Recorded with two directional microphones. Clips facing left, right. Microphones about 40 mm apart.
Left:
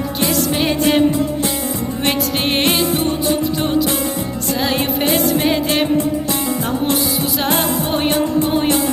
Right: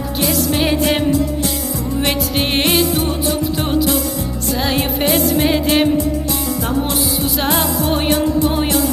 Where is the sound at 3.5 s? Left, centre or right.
Centre.